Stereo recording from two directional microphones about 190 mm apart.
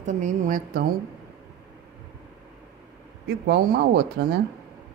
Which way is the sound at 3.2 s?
60° right (ahead or behind).